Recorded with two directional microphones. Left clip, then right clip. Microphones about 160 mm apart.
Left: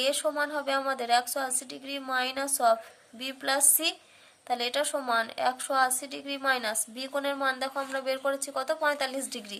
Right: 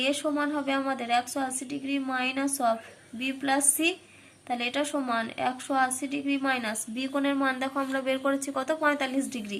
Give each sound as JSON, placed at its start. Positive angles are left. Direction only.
{"t": 0.0, "sound": "a woman's voice", "side_deg": 45}